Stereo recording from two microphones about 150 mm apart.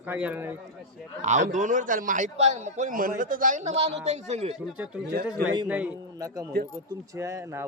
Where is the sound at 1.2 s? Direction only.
55° right (ahead or behind).